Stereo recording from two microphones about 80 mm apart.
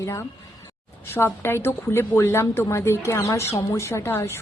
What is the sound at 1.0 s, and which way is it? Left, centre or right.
A woman's voice, left.